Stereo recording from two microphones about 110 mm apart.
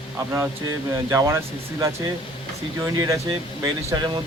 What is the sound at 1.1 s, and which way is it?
Speech, 25° right (ahead or behind).